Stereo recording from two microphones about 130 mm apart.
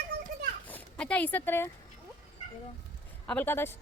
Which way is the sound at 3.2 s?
10° left (ahead or behind).